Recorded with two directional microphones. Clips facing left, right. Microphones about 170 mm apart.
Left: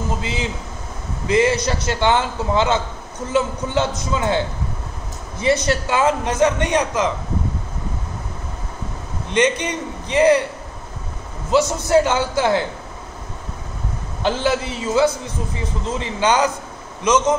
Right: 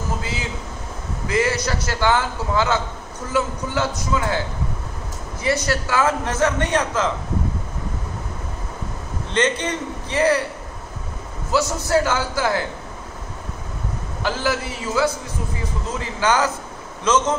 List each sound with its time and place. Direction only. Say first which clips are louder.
1.2 s a man's voice: left 4 dB; 20° left (ahead or behind)
5.4 s a man's voice: left 3 dB; 20° left (ahead or behind)
9.3 s a man's voice: left 3 dB; 15° left (ahead or behind)
11.5 s a man's voice: left 4 dB; 20° left (ahead or behind)
14.2 s a man's voice: left 4 dB; 20° left (ahead or behind)